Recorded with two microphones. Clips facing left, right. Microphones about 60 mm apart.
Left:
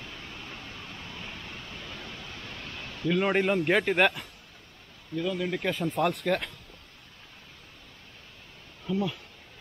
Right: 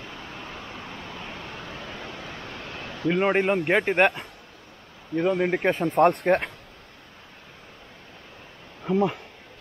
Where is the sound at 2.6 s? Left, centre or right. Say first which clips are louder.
Right 5 dB; right.